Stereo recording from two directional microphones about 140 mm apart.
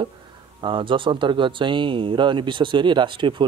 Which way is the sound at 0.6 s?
35° right (ahead or behind).